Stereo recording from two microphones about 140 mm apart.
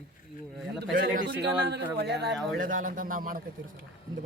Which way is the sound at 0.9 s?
75° right (ahead or behind).